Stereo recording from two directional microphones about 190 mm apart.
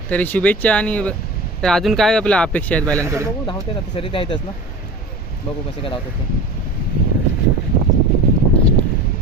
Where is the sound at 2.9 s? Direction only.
15° right (ahead or behind).